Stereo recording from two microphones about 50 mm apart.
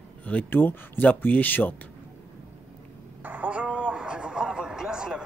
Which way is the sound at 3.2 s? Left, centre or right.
Right.